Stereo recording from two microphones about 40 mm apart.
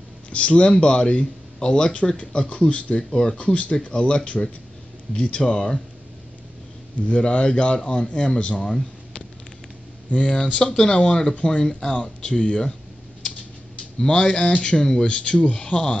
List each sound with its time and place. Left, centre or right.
0.3 s speech: left
3.5 s speech: left
5.5 s speech: centre
7.1 s speech: left
13.9 s speech: left